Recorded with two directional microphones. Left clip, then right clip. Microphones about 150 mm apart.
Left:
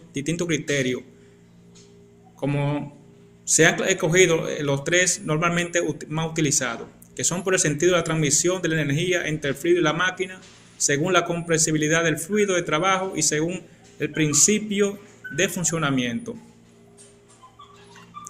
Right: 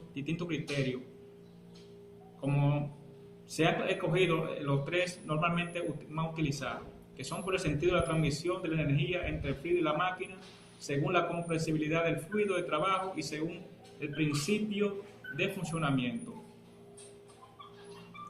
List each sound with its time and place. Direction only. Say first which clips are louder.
0.1 s a man's voice: left 12 dB; 20° left (ahead or behind)
2.4 s a man's voice: left 8 dB; 20° left (ahead or behind)